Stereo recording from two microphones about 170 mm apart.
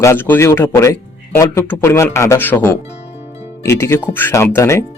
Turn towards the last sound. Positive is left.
turn(degrees=15)  # may be behind; listen again after turning